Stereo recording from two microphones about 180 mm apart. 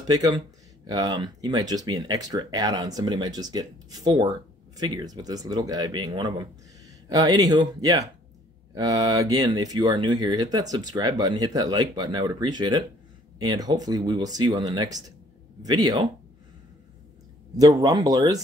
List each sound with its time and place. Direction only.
0.1 s speech: 20° right (ahead or behind)
17.6 s speech: 20° right (ahead or behind)